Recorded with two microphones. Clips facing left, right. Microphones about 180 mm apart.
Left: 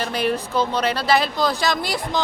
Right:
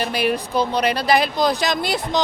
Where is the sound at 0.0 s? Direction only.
10° right (ahead or behind).